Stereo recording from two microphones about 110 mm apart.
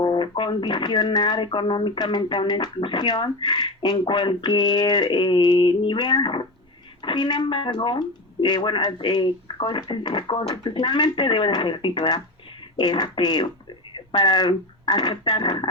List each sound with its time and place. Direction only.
0.0 s speech: 45° left (ahead or behind)
10.6 s speech: 45° left (ahead or behind)